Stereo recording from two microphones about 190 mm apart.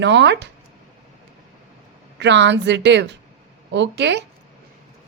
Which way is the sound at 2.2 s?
70° right (ahead or behind).